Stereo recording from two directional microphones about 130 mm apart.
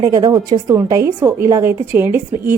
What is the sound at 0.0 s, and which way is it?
A woman's voice, 30° right (ahead or behind).